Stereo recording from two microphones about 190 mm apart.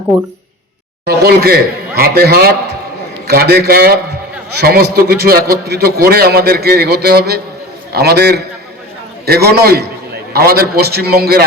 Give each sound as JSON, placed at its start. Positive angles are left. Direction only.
{"t": 1.0, "sound": "a man's voice", "side_deg": -55}